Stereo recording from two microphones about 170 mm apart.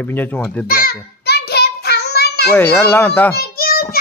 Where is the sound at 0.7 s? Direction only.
60° left (ahead or behind).